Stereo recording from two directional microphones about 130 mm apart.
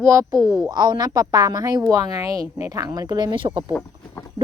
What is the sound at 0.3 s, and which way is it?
Speech, 5° right (ahead or behind).